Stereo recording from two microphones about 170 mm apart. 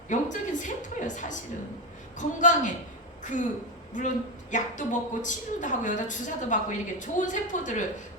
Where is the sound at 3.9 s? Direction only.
50° left (ahead or behind).